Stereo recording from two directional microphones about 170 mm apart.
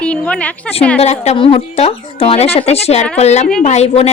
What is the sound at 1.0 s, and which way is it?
A woman's voice, 40° left (ahead or behind).